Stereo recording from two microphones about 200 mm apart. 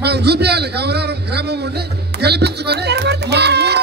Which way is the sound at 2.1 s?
55° right (ahead or behind).